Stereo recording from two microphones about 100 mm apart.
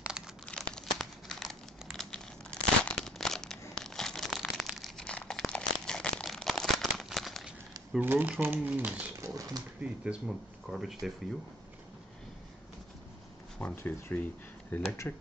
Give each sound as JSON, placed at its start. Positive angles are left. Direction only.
{"t": 0.5, "sound": "crumpling", "side_deg": 5}
{"t": 5.5, "sound": "a sound", "side_deg": 10}
{"t": 8.0, "sound": "speech", "side_deg": -20}
{"t": 9.2, "sound": "speech", "side_deg": -35}
{"t": 9.8, "sound": "speech", "side_deg": -10}
{"t": 13.6, "sound": "speech", "side_deg": 20}